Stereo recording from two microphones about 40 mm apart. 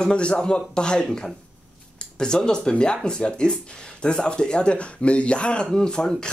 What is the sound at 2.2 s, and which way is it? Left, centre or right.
Speech, centre.